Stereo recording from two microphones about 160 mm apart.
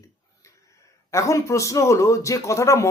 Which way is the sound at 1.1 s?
20° left (ahead or behind).